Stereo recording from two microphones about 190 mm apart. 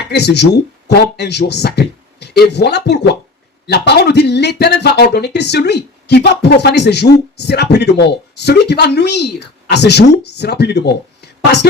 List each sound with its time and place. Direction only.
0.1 s speech: 60° left (ahead or behind)